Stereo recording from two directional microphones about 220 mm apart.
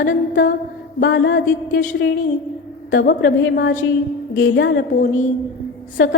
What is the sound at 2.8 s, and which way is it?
A woman's voice, 50° left (ahead or behind).